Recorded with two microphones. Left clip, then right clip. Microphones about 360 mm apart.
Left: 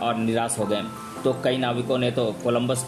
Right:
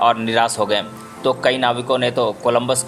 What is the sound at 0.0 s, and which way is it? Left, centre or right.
Speech, centre.